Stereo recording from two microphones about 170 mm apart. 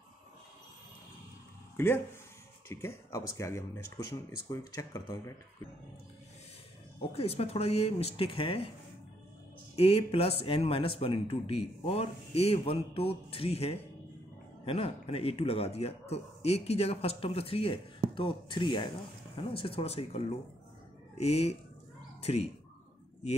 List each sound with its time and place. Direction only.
1.8 s speech: 15° left (ahead or behind)
7.0 s speech: 35° left (ahead or behind)
9.8 s speech: 35° left (ahead or behind)